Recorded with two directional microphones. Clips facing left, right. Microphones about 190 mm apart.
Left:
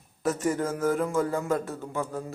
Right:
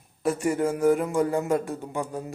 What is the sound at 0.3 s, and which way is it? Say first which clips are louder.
A man's voice: right 2 dB; 15° right (ahead or behind).